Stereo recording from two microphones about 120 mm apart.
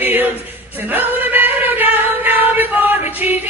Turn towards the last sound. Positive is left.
turn(degrees=-15)  # may be behind; listen again after turning